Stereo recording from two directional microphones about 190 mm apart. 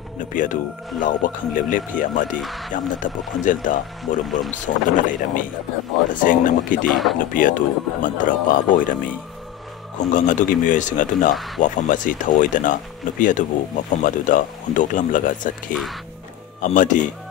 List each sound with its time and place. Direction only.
0.2 s speech: 45° left (ahead or behind)
2.3 s music: centre (ahead or behind)
3.0 s speech: 45° left (ahead or behind)
6.9 s music: centre (ahead or behind)
7.2 s speech: 45° left (ahead or behind)
9.9 s speech: 40° left (ahead or behind)
11.3 s music: centre (ahead or behind)
11.6 s speech: 40° left (ahead or behind)
15.7 s music: centre (ahead or behind)
16.6 s speech: 40° left (ahead or behind)